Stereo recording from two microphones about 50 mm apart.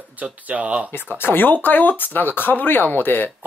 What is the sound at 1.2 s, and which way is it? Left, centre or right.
Speech, left.